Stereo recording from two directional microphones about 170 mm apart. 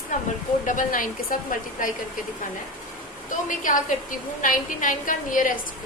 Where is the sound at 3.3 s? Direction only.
50° left (ahead or behind).